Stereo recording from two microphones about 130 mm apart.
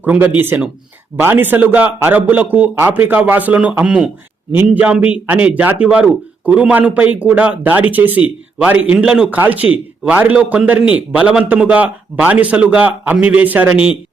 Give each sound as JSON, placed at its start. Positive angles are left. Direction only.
{"t": 0.0, "sound": "a man's voice", "side_deg": -15}
{"t": 13.7, "sound": "speech", "side_deg": 45}